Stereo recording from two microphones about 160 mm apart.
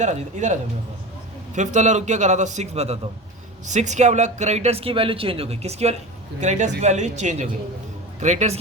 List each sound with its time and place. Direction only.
0.0 s a man's voice: 45° right (ahead or behind)
1.5 s a man's voice: 50° right (ahead or behind)